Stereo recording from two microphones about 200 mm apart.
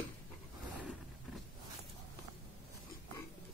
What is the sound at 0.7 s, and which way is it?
Roaring cats, 5° right (ahead or behind).